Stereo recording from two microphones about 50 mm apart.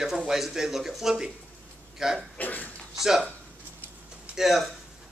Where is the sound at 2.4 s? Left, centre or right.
Left.